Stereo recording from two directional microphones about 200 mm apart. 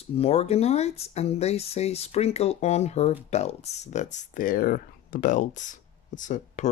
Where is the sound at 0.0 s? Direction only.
30° left (ahead or behind).